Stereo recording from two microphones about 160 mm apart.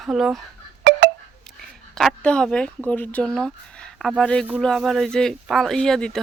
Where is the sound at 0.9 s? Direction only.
90° right.